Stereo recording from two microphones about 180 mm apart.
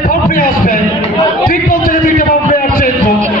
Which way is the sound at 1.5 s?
50° left (ahead or behind).